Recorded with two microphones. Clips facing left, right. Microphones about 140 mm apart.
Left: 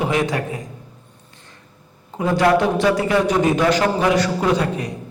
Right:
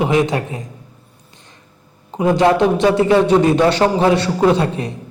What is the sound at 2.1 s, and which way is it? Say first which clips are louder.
A man's voice: right 3 dB; 20° right (ahead or behind).